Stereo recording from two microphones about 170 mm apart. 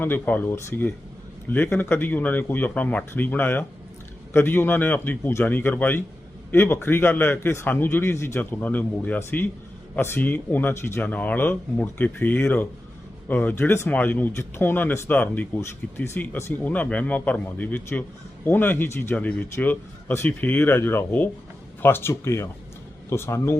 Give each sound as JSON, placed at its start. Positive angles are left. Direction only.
{"t": 0.0, "sound": "speech", "side_deg": 10}